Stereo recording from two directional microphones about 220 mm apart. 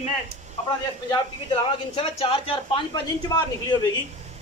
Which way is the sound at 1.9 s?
25° left (ahead or behind).